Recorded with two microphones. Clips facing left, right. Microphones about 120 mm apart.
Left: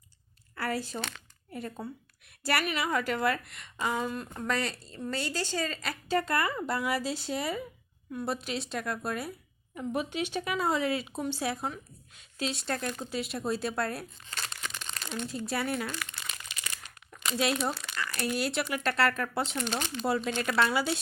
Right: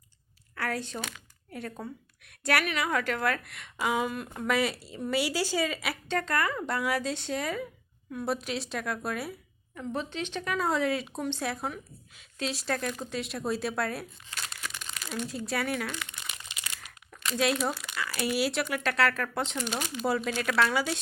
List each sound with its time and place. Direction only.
0.5 s a woman's voice: 5° left (ahead or behind)
6.1 s speech: 5° left (ahead or behind)
9.7 s speech: 10° left (ahead or behind)
16.0 s crumpling: 15° right (ahead or behind)
17.3 s speech: centre (ahead or behind)
17.7 s speech: 10° right (ahead or behind)
19.6 s speech: 10° right (ahead or behind)